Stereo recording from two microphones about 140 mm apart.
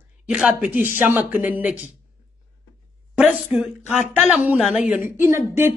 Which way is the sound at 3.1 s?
10° right (ahead or behind).